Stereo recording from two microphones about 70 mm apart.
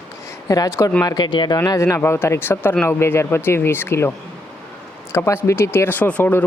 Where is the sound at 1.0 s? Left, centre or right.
Left.